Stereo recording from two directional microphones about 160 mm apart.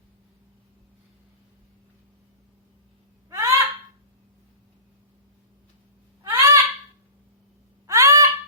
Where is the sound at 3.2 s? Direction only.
20° right (ahead or behind).